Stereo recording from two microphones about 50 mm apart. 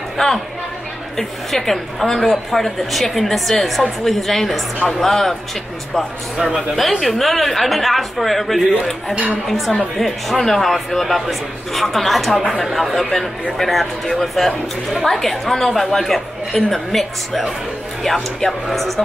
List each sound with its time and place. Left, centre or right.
1.1 s speech: centre
6.4 s speech: centre
9.9 s speech: centre